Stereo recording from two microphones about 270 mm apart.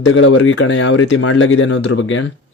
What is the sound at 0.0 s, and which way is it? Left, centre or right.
Speech, left.